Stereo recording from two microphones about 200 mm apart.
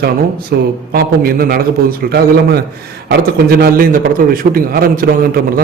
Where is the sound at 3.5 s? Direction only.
50° right (ahead or behind).